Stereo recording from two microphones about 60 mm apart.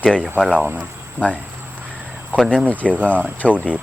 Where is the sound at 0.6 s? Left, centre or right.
Right.